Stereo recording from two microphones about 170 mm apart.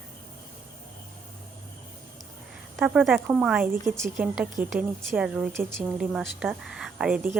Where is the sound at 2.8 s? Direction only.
Centre (ahead or behind).